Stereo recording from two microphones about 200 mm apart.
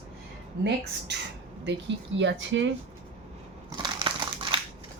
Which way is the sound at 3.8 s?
25° right (ahead or behind).